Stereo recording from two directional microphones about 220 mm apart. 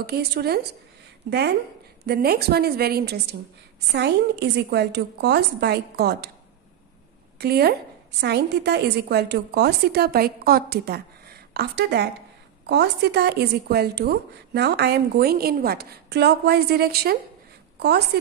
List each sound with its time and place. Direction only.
0.0 s a woman's voice: 45° right (ahead or behind)
2.0 s a woman's voice: 45° right (ahead or behind)
7.3 s a woman's voice: 45° right (ahead or behind)